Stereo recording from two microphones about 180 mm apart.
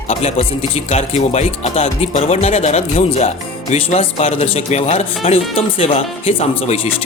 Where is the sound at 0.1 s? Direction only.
40° left (ahead or behind).